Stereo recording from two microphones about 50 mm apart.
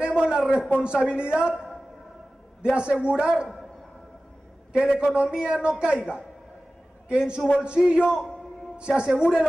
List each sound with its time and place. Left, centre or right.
0.0 s a sound: centre
0.7 s a man's voice: centre
2.7 s a man's voice: right
5.0 s a man's voice: right